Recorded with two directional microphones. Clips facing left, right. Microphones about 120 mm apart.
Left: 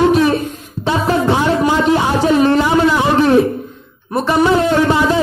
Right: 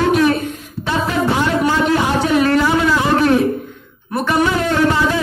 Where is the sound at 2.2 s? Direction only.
30° left (ahead or behind).